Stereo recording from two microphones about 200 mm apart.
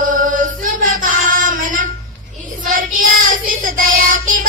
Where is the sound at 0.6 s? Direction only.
45° right (ahead or behind).